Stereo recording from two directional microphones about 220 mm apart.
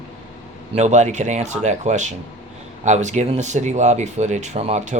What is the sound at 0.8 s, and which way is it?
Speech, 30° right (ahead or behind).